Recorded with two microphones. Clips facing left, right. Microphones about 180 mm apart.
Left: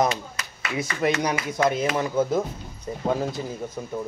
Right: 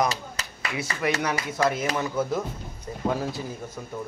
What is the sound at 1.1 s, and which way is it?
Speech, 15° left (ahead or behind).